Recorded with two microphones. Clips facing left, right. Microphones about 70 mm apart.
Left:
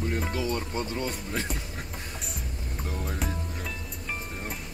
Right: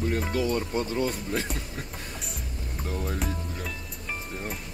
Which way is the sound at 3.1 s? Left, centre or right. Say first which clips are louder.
Right 1 dB; centre.